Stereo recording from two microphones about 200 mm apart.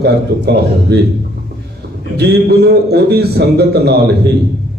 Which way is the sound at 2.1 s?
55° right (ahead or behind).